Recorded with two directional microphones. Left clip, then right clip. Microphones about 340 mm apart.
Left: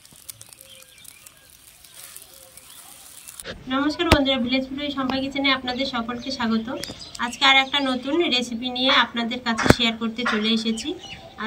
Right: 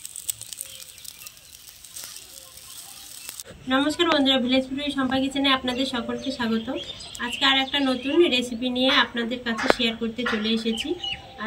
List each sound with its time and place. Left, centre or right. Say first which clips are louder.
3.6 s a woman's voice: even; centre